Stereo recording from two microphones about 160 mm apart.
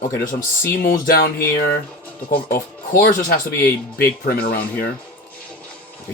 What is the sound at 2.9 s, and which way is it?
Speech, 60° left (ahead or behind).